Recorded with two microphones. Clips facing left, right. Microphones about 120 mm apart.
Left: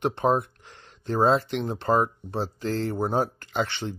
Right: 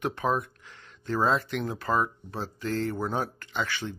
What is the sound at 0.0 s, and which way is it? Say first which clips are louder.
Speech: left 5 dB; 30° left (ahead or behind).